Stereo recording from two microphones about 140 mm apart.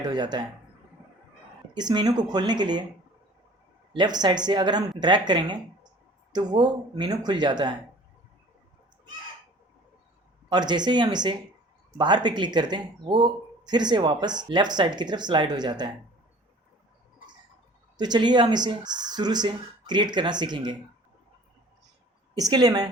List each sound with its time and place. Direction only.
0.1 s speech: 30° right (ahead or behind)
1.7 s speech: 30° right (ahead or behind)
3.9 s speech: 30° right (ahead or behind)
10.5 s speech: 30° right (ahead or behind)
17.9 s speech: 30° right (ahead or behind)
22.4 s a woman's voice: 25° right (ahead or behind)